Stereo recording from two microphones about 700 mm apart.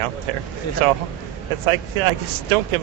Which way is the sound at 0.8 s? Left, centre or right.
Right.